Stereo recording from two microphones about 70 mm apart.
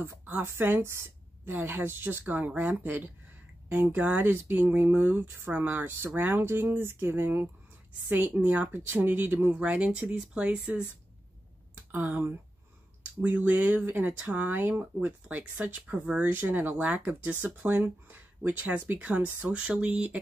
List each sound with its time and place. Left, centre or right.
0.0 s speech: right; by 10.6 s centre
11.7 s speech: right